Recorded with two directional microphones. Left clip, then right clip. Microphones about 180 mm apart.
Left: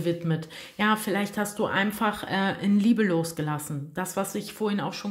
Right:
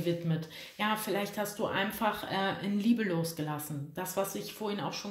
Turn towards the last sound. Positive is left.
turn(degrees=50)  # may be behind; listen again after turning